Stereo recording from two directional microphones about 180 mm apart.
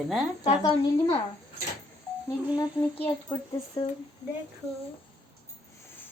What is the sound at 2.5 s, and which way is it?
Speech, 30° left (ahead or behind).